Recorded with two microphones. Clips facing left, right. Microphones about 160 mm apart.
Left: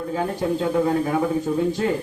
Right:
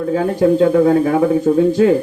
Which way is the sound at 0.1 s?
70° right (ahead or behind).